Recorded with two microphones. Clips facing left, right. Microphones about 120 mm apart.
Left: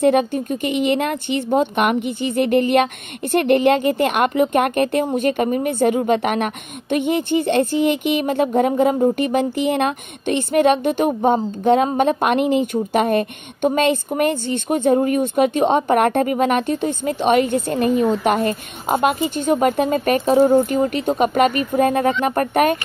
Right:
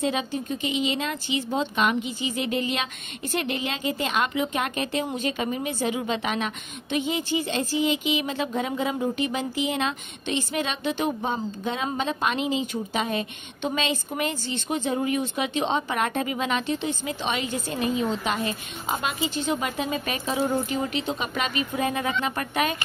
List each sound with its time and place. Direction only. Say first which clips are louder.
0.0 s a woman's voice: left 10 dB; 55° left (ahead or behind)